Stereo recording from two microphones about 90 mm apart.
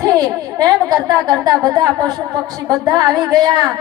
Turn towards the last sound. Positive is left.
turn(degrees=-50)  # may be behind; listen again after turning